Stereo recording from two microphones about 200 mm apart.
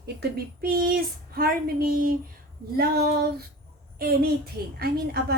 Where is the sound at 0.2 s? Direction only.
50° right (ahead or behind).